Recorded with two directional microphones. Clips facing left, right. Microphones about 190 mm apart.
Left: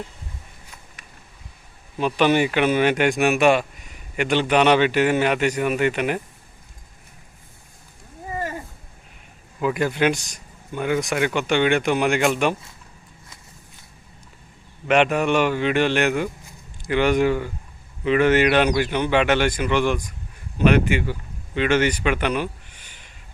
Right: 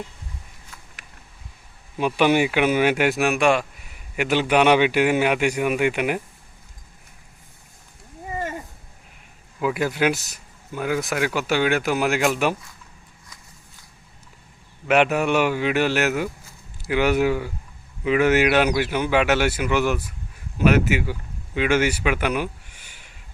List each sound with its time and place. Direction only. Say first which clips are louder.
2.0 s a man's voice: even; 10° right (ahead or behind)
9.6 s speech: left 1 dB; 5° right (ahead or behind)
14.8 s a man's voice: even; 10° right (ahead or behind)